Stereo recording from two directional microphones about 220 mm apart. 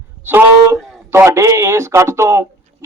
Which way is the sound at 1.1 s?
10° right (ahead or behind).